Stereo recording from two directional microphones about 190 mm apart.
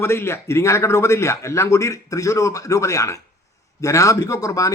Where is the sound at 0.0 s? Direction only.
15° left (ahead or behind).